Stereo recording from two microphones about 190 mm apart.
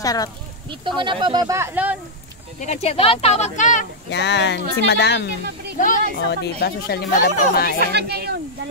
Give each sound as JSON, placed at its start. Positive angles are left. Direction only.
{"t": 0.0, "sound": "speech", "side_deg": 20}
{"t": 0.7, "sound": "speech", "side_deg": -25}
{"t": 2.6, "sound": "speech", "side_deg": 35}
{"t": 4.1, "sound": "speech", "side_deg": 65}
{"t": 5.8, "sound": "speech", "side_deg": 45}
{"t": 6.1, "sound": "speech", "side_deg": 60}
{"t": 7.9, "sound": "speech", "side_deg": -60}